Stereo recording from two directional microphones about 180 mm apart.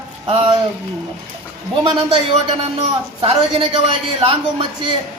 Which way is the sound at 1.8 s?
35° right (ahead or behind).